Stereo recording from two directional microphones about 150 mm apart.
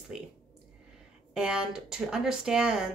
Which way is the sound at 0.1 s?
5° right (ahead or behind).